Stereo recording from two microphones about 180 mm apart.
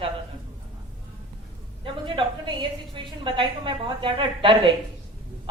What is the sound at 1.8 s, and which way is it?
A woman's voice, 25° right (ahead or behind).